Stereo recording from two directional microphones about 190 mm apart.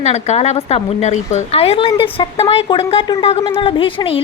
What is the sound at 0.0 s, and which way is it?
A woman's voice, 35° left (ahead or behind).